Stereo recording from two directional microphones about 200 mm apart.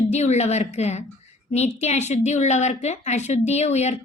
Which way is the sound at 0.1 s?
35° left (ahead or behind).